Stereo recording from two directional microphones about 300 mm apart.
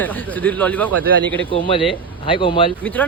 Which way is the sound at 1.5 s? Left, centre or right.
Centre.